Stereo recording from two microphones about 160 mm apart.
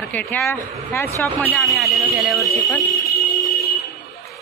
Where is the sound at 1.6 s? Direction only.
Centre (ahead or behind).